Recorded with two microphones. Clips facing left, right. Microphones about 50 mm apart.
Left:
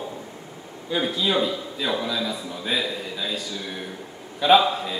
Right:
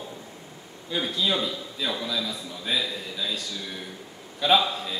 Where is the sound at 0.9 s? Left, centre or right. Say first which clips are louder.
Left 3 dB; centre.